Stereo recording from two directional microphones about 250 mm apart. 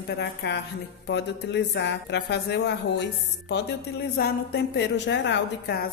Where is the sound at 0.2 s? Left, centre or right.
Left.